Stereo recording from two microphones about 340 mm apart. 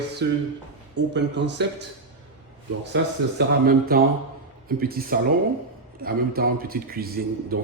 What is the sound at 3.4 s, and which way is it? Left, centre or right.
A man's voice, right.